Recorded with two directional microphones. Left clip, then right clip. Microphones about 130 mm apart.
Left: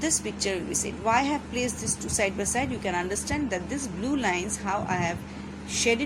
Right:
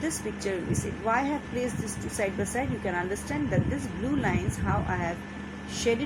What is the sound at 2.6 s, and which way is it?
Speech, 90° left.